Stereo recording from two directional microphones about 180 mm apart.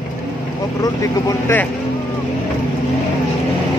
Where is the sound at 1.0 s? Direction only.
15° left (ahead or behind).